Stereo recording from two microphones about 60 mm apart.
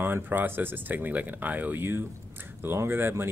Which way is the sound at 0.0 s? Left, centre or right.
Right.